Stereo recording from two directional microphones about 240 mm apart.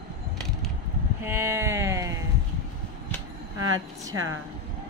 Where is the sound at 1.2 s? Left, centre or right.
Centre.